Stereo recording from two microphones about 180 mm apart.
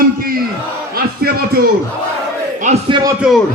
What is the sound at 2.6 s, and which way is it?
Speech, 35° right (ahead or behind).